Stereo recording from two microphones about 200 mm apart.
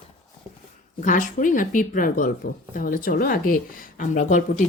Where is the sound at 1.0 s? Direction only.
40° left (ahead or behind).